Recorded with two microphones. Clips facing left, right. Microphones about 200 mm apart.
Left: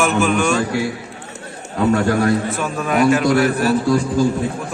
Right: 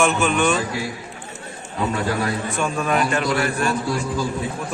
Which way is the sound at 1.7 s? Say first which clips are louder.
Left 7 dB; 50° left (ahead or behind).